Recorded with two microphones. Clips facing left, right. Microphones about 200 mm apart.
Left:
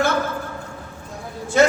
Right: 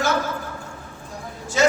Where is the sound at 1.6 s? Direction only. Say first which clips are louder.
Left 2 dB; 55° left (ahead or behind).